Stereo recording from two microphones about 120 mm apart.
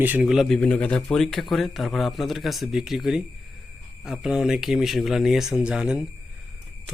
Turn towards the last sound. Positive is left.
turn(degrees=-5)  # may be behind; listen again after turning